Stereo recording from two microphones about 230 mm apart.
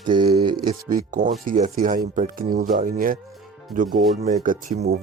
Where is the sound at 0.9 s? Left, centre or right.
Right.